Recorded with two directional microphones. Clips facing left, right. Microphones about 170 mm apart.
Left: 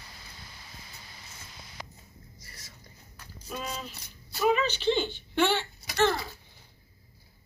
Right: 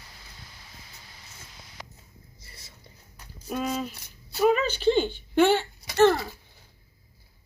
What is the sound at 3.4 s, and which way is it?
Speech, 50° right (ahead or behind).